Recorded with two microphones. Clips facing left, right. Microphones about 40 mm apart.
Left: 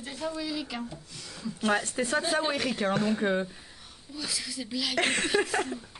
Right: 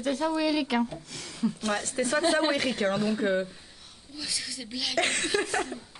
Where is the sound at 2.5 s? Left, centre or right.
Centre.